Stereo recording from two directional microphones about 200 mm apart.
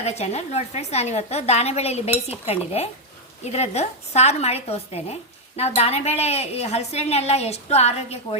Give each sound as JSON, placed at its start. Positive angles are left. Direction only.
{"t": 0.0, "sound": "a woman's voice", "side_deg": 35}